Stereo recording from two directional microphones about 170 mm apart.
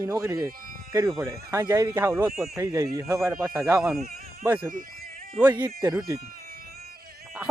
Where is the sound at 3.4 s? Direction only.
5° right (ahead or behind).